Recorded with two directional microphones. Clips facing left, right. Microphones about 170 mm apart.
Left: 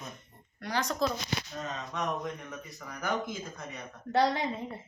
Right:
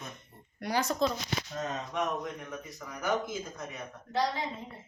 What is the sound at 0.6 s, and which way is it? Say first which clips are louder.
Speech: right 2 dB; 10° right (ahead or behind).